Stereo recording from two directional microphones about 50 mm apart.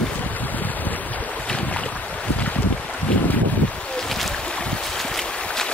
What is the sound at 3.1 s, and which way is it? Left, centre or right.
Boat, left.